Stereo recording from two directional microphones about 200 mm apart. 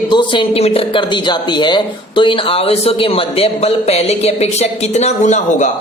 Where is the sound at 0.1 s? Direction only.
25° left (ahead or behind).